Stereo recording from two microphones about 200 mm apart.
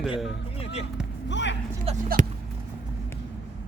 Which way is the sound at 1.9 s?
30° right (ahead or behind).